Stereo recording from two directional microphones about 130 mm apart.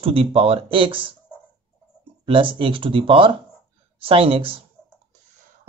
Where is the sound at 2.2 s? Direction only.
40° right (ahead or behind).